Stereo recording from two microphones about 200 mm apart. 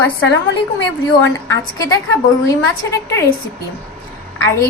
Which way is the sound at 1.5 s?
15° left (ahead or behind).